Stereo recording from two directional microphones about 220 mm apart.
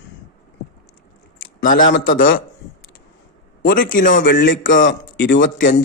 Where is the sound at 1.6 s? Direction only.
40° left (ahead or behind).